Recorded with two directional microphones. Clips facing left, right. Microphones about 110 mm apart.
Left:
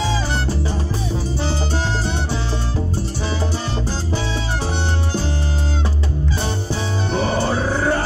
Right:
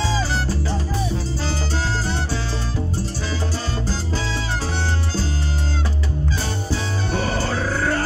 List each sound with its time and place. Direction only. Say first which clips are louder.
6.4 s music: left 2 dB; 20° left (ahead or behind)